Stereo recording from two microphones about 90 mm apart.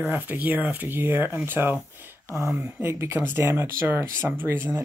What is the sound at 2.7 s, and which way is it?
Speech, 30° right (ahead or behind).